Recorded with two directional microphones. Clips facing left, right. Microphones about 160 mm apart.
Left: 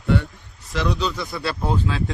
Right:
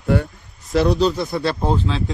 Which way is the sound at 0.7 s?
35° right (ahead or behind).